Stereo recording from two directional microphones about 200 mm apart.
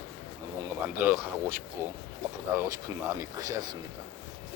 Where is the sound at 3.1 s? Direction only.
15° right (ahead or behind).